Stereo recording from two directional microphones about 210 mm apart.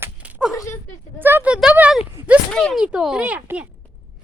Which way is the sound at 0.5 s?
15° left (ahead or behind).